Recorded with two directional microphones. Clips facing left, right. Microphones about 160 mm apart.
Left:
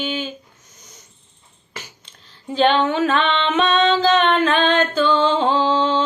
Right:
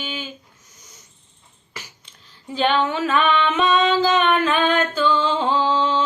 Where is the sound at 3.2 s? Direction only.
25° left (ahead or behind).